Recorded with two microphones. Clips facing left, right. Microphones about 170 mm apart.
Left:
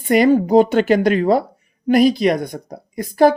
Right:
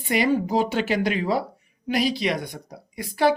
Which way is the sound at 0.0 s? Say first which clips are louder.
Left 8 dB; 50° left (ahead or behind).